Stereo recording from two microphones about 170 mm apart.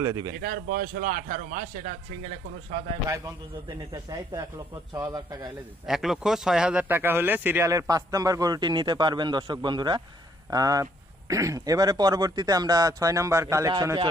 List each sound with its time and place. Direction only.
0.0 s speech: 15° right (ahead or behind)
0.3 s a man's voice: 60° right (ahead or behind)
3.8 s speech: 25° right (ahead or behind)
5.8 s speech: centre (ahead or behind); by 14.1 s 25° right (ahead or behind)